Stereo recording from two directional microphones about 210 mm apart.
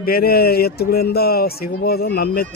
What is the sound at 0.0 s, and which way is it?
Speech, 45° left (ahead or behind).